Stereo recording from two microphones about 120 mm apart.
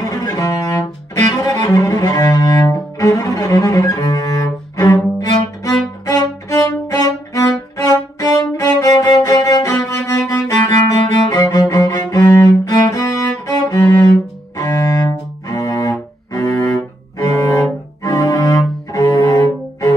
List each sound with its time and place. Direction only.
0.0 s music: 30° left (ahead or behind)
1.3 s cello: 30° left (ahead or behind)
6.0 s music: 30° left (ahead or behind)
14.6 s cello: 30° left (ahead or behind)